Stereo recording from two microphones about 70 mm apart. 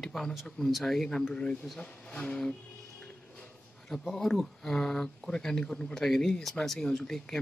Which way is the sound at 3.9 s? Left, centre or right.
Centre.